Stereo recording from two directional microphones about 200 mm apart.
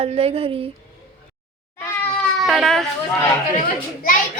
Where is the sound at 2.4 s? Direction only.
Centre (ahead or behind).